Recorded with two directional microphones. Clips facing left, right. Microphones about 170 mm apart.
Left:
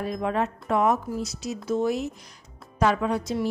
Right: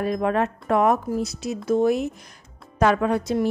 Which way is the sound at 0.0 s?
60° right (ahead or behind).